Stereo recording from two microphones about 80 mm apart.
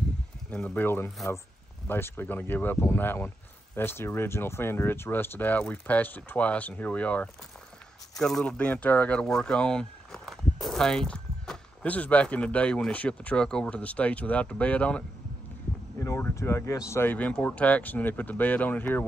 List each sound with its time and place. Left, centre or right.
0.5 s speech: centre
0.8 s speech: left
8.2 s speech: centre
8.5 s speech: centre
11.8 s speech: centre
16.3 s speech: left
17.0 s speech: left